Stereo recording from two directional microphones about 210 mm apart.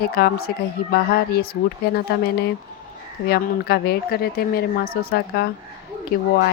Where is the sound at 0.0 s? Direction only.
45° left (ahead or behind).